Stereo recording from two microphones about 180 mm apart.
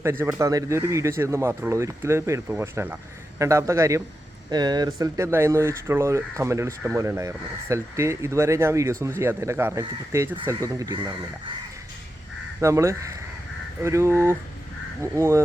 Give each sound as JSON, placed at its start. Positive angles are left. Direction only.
{"t": 0.0, "sound": "speech", "side_deg": -15}
{"t": 12.5, "sound": "speech", "side_deg": -15}